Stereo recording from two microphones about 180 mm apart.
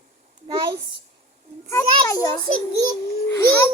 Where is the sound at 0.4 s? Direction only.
25° right (ahead or behind).